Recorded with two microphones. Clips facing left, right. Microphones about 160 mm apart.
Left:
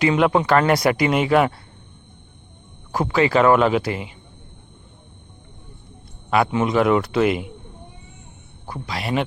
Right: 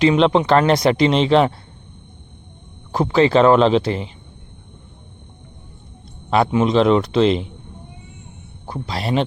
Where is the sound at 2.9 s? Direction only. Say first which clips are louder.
Right 3 dB; 25° right (ahead or behind).